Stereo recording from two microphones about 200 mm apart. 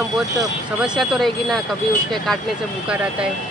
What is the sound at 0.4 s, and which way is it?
Speech, 5° right (ahead or behind).